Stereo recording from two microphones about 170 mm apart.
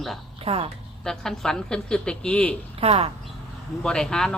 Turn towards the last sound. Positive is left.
turn(degrees=5)  # may be behind; listen again after turning